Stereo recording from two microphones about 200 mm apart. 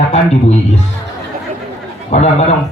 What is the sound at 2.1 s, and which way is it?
Speech, 35° left (ahead or behind).